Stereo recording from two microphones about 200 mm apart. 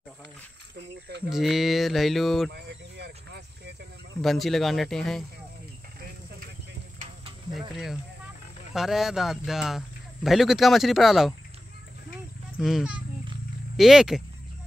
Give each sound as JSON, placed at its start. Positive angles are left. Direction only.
{"t": 0.7, "sound": "speech", "side_deg": -55}
{"t": 1.3, "sound": "speech", "side_deg": 0}
{"t": 2.5, "sound": "a sound", "side_deg": -55}
{"t": 4.2, "sound": "speech", "side_deg": 0}
{"t": 7.5, "sound": "speech", "side_deg": 0}
{"t": 12.5, "sound": "speech", "side_deg": -5}